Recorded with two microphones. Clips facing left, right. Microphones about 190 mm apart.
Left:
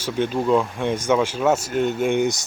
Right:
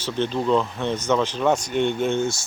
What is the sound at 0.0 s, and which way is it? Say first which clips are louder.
Speech: left 2 dB; 10° left (ahead or behind).